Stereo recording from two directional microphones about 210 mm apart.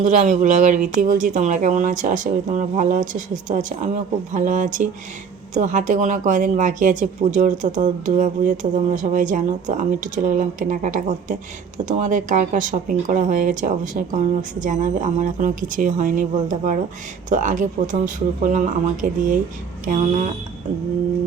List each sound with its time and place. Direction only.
0.0 s speech: 35° right (ahead or behind)